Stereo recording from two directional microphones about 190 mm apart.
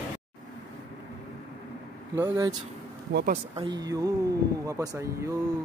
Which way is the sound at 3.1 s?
60° right (ahead or behind).